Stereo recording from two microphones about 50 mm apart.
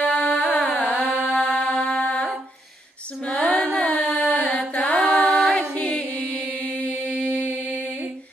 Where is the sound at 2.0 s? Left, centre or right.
Left.